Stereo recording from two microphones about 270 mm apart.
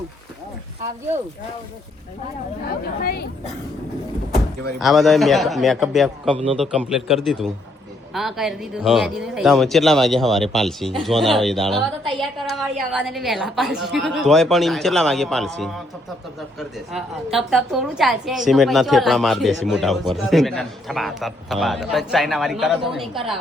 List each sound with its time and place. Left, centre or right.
2.6 s speech: left
4.8 s a man's voice: centre
6.3 s a man's voice: centre
6.6 s a man's voice: centre